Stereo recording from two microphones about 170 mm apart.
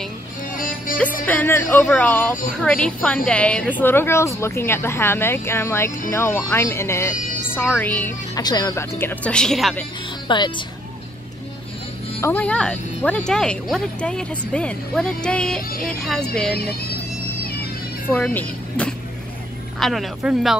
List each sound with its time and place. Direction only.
0.5 s music: 55° left (ahead or behind)
1.2 s a woman's voice: 10° left (ahead or behind)
8.4 s a woman's voice: 25° left (ahead or behind); by 9.8 s centre (ahead or behind)
10.2 s speech: 25° left (ahead or behind)
12.2 s speech: 10° left (ahead or behind)
18.1 s speech: 10° left (ahead or behind)